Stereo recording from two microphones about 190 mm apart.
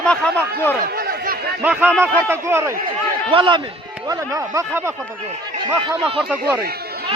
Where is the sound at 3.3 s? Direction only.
25° right (ahead or behind).